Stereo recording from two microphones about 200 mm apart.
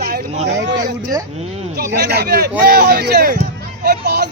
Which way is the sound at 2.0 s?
55° right (ahead or behind).